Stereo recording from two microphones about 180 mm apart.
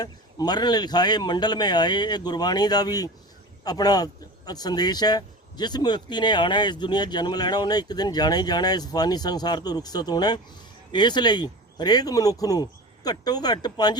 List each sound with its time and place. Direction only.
0.0 s speech: 20° left (ahead or behind)